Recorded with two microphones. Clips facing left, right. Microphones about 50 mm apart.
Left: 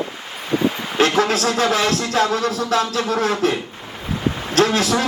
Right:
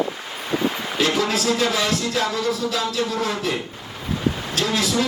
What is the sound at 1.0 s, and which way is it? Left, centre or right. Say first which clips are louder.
Music: left 5 dB; left.